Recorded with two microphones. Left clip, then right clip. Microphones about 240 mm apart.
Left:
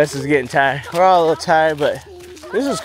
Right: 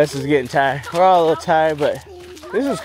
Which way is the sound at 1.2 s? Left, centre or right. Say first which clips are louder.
Left 1 dB; left.